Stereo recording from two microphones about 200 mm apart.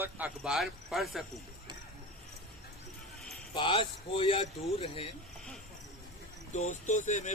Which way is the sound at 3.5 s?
25° left (ahead or behind).